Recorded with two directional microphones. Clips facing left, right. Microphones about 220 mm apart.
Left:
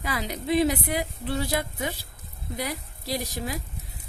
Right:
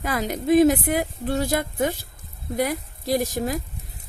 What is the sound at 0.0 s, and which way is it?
A woman's voice, 50° right (ahead or behind).